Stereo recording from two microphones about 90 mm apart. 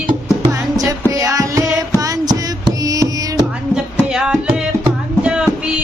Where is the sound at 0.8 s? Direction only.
40° right (ahead or behind).